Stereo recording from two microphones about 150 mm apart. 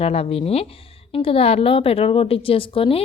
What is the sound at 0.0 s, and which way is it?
A woman's voice, 40° left (ahead or behind).